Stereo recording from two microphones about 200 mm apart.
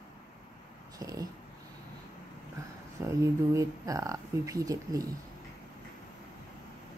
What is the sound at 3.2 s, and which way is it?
A woman's voice, 15° right (ahead or behind).